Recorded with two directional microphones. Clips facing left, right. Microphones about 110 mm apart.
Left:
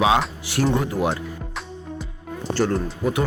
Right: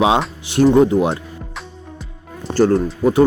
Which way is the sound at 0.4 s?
25° right (ahead or behind).